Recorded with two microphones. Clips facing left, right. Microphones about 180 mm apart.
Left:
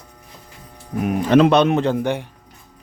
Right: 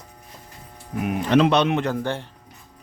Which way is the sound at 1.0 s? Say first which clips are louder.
Left 4 dB; 45° left (ahead or behind).